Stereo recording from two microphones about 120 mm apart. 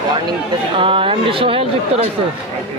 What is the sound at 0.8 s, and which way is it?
Speech, 50° right (ahead or behind).